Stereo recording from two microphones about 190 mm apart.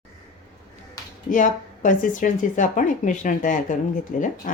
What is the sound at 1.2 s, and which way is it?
A woman's voice, 45° left (ahead or behind).